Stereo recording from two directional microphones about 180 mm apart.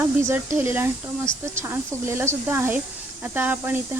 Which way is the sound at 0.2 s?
10° right (ahead or behind).